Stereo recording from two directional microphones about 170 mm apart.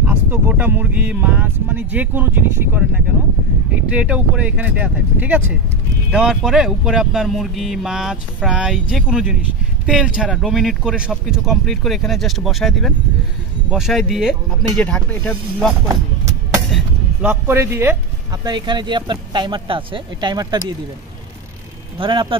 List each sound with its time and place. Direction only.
0.0 s speech: 10° right (ahead or behind)
15.9 s vehicle: 15° right (ahead or behind)
16.7 s speech: 10° right (ahead or behind)
18.4 s speech: 25° right (ahead or behind)
21.9 s speech: 30° right (ahead or behind)